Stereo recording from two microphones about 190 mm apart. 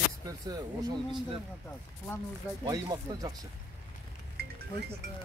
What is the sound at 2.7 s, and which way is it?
Speech, 20° right (ahead or behind).